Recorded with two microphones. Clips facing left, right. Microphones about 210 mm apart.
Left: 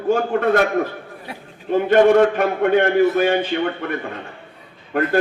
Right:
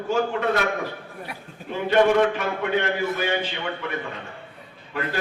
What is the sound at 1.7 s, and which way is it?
A man's voice, 50° left (ahead or behind).